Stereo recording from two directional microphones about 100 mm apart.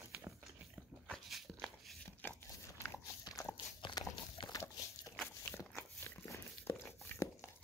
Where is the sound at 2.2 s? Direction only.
15° left (ahead or behind).